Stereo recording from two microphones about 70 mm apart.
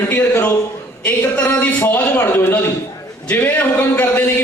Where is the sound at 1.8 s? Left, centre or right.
Left.